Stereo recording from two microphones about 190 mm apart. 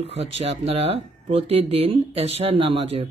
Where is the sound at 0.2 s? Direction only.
30° right (ahead or behind).